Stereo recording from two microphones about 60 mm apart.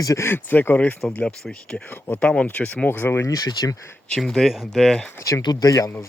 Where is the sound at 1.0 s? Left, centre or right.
Centre; by 3.2 s left.